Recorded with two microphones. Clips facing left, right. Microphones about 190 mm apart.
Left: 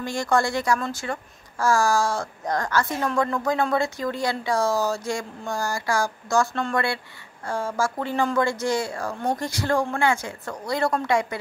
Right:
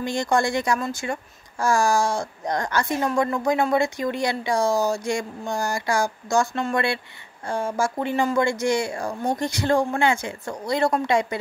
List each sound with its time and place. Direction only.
0.0 s a woman's voice: 20° right (ahead or behind)